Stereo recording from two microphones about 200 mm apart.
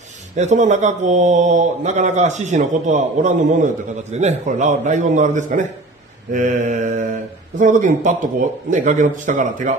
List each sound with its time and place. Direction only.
0.4 s a man's voice: 35° right (ahead or behind)